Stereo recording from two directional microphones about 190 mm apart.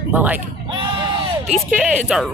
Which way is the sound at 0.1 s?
10° right (ahead or behind).